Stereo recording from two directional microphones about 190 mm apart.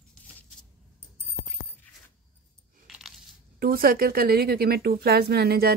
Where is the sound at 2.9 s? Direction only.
Centre (ahead or behind).